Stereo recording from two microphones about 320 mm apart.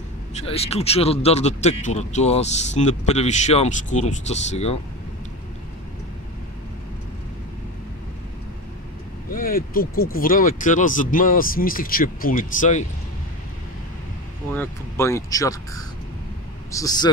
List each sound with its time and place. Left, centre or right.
0.3 s speech: centre
9.3 s speech: left
14.5 s speech: centre